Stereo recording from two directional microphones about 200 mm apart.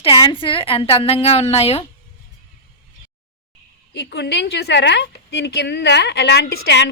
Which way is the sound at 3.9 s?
55° left (ahead or behind).